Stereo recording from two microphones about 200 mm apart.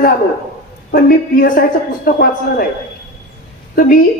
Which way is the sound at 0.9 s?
50° left (ahead or behind).